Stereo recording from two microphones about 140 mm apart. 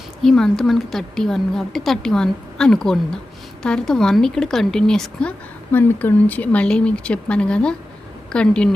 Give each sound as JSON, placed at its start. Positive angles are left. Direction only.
{"t": 0.2, "sound": "a woman's voice", "side_deg": 5}